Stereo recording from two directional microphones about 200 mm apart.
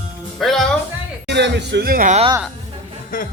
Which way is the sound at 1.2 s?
60° right (ahead or behind).